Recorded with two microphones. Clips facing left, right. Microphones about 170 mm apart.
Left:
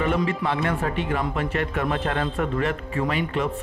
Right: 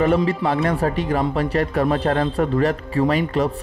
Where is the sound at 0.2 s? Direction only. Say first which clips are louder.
Right 4 dB; 35° right (ahead or behind).